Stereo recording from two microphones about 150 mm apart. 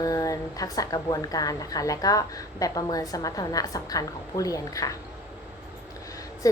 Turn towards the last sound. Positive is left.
turn(degrees=20)  # may be behind; listen again after turning